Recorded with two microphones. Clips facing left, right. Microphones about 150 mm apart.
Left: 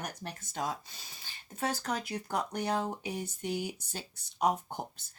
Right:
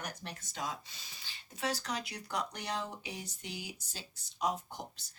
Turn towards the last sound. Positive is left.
turn(degrees=55)  # may be behind; listen again after turning